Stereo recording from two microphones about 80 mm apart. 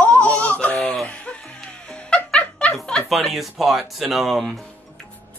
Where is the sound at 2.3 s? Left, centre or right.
Centre.